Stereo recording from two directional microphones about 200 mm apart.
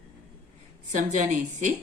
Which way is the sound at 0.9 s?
40° right (ahead or behind).